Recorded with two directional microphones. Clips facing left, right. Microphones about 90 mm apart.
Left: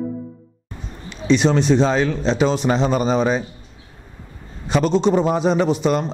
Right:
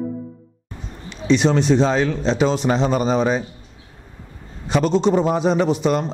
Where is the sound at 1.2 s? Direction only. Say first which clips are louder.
Even; 15° left (ahead or behind).